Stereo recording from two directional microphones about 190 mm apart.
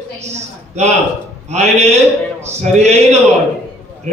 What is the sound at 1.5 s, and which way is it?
A man's voice, 35° right (ahead or behind).